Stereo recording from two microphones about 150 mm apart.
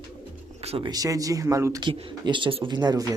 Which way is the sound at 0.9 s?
25° right (ahead or behind).